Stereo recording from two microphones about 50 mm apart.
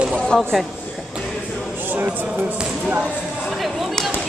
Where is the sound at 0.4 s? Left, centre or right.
Centre.